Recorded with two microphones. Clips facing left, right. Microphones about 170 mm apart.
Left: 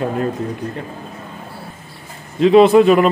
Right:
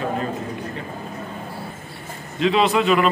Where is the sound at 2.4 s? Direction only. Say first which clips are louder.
Left 9 dB; 45° left (ahead or behind).